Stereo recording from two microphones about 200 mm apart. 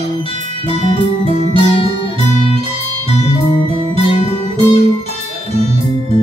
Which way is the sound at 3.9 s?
30° left (ahead or behind).